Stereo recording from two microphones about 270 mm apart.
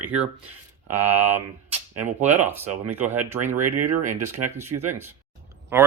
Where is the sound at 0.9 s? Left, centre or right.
Right.